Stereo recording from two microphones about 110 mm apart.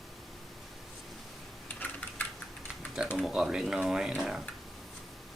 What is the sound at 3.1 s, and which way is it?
Speech, 5° right (ahead or behind).